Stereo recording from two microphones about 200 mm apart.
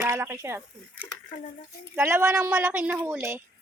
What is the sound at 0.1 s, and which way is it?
A child's voice, 10° right (ahead or behind).